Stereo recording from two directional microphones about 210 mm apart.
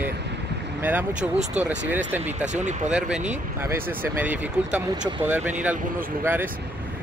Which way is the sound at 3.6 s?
10° right (ahead or behind).